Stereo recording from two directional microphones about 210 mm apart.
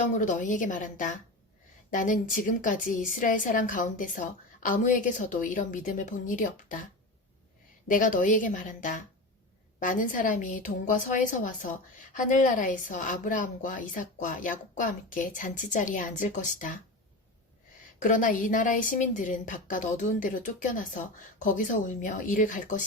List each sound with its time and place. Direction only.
0.0 s a woman's voice: 35° left (ahead or behind)
7.9 s a woman's voice: 40° left (ahead or behind)
18.0 s a woman's voice: 40° left (ahead or behind)